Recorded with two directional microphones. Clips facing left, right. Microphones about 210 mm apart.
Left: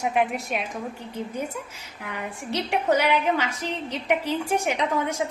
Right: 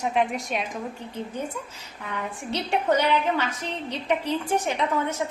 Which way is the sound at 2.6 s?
10° left (ahead or behind).